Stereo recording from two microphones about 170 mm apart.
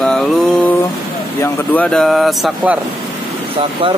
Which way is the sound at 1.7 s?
5° left (ahead or behind).